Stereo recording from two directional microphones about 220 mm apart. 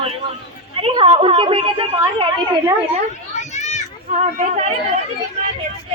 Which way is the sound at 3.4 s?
30° left (ahead or behind).